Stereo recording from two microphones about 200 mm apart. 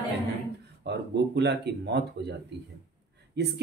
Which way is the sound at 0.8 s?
55° right (ahead or behind).